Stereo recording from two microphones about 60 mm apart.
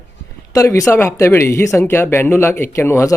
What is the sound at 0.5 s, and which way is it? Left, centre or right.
Speech, left.